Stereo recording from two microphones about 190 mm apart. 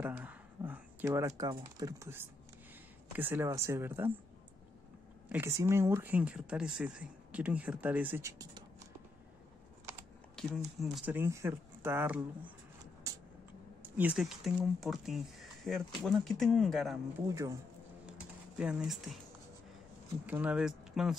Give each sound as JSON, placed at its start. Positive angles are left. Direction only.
{"t": 0.0, "sound": "speech", "side_deg": -10}
{"t": 5.3, "sound": "speech", "side_deg": -15}
{"t": 10.3, "sound": "speech", "side_deg": 0}
{"t": 11.1, "sound": "speech", "side_deg": -15}
{"t": 13.8, "sound": "speech", "side_deg": -10}
{"t": 17.3, "sound": "speech", "side_deg": -15}
{"t": 18.6, "sound": "speech", "side_deg": -5}
{"t": 20.2, "sound": "speech", "side_deg": -10}